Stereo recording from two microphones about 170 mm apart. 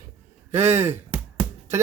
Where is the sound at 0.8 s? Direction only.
15° right (ahead or behind).